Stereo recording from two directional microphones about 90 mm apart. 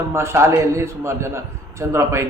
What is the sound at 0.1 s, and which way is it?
A man's voice, 30° right (ahead or behind).